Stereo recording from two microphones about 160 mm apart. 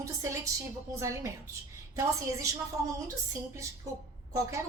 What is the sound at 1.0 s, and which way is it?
Speech, 20° right (ahead or behind).